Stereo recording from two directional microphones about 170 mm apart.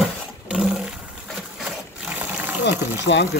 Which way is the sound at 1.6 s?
5° right (ahead or behind).